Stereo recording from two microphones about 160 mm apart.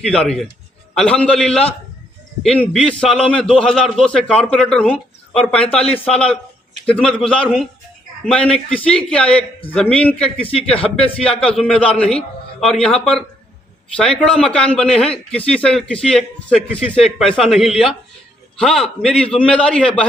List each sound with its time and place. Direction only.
0.0 s a man's voice: 5° left (ahead or behind)
10.3 s speech: 35° left (ahead or behind)
11.3 s a man's voice: 5° left (ahead or behind)